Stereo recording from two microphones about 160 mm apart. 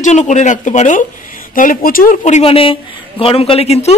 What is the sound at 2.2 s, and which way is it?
A woman's voice, 40° left (ahead or behind).